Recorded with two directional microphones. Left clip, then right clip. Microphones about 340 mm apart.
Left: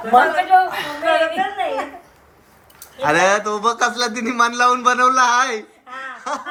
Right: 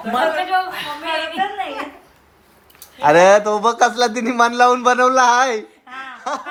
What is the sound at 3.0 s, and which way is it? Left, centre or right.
A man's voice, centre.